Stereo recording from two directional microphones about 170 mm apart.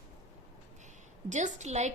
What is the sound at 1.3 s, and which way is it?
Speech, 45° right (ahead or behind).